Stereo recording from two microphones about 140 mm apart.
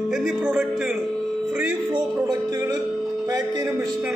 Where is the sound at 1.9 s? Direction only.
30° right (ahead or behind).